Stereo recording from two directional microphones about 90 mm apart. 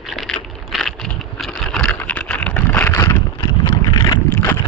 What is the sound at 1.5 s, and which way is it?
Vehicle, 10° left (ahead or behind).